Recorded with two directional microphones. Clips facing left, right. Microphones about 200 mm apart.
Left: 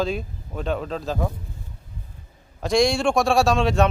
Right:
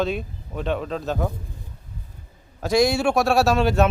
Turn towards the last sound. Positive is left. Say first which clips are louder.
# even
turn(degrees=-5)  # may be behind; listen again after turning